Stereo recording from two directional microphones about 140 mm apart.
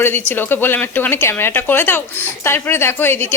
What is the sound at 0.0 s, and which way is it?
A woman's voice, 15° left (ahead or behind).